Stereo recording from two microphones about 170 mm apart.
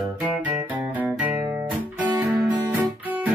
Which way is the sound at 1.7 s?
20° right (ahead or behind).